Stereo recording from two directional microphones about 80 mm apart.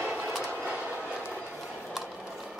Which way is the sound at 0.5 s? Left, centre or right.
Centre.